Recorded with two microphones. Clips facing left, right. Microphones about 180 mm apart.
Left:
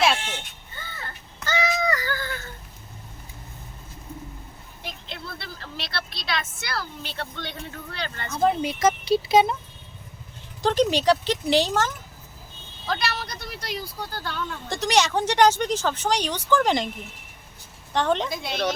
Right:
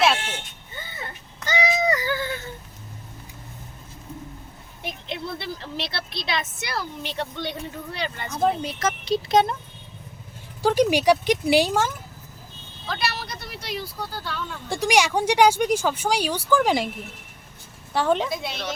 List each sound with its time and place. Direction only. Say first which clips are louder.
0.9 s a sound: right 2 dB; 20° right (ahead or behind)
4.8 s speech: right 6 dB; 20° right (ahead or behind)
8.6 s speech: left 4 dB; 10° left (ahead or behind)
10.6 s speech: right 2 dB; 10° right (ahead or behind)
12.9 s speech: left 1 dB; centre (ahead or behind)
17.9 s a woman's voice: right 1 dB; 5° right (ahead or behind)